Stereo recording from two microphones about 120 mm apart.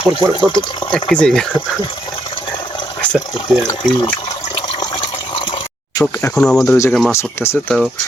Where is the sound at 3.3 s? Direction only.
35° left (ahead or behind).